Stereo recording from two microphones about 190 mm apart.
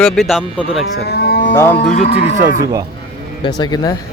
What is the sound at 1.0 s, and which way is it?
Moo, 55° left (ahead or behind).